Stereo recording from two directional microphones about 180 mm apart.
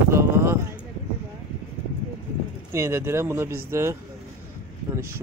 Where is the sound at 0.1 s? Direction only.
15° right (ahead or behind).